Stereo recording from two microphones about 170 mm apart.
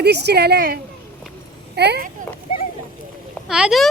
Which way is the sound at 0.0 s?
75° right (ahead or behind).